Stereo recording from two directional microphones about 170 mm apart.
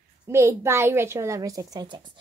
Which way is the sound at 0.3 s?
15° right (ahead or behind).